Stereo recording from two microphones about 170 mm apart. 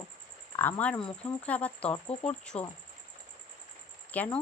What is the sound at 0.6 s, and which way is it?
Speech, 10° left (ahead or behind).